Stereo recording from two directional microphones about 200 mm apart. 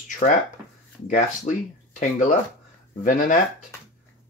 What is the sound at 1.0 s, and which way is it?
Speech, 40° left (ahead or behind).